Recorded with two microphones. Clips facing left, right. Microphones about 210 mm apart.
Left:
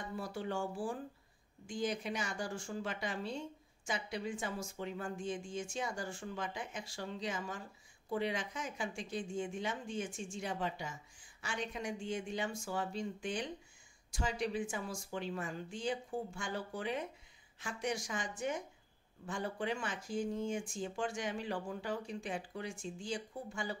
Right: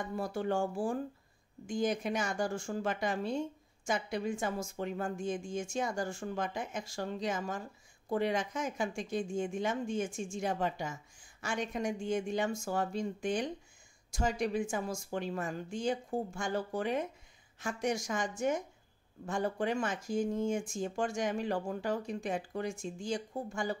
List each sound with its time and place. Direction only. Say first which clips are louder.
0.1 s speech: right 6 dB; 50° right (ahead or behind)